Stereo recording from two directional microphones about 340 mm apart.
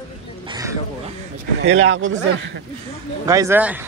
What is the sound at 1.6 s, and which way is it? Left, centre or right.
Speech, right.